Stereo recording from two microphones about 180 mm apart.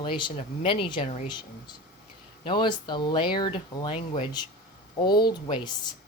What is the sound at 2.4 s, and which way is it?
Speech, 25° left (ahead or behind).